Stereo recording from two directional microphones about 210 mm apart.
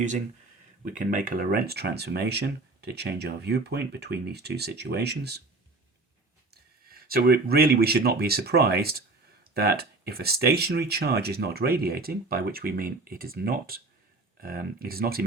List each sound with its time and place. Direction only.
0.9 s speech: 40° right (ahead or behind)
6.5 s speech: 45° right (ahead or behind)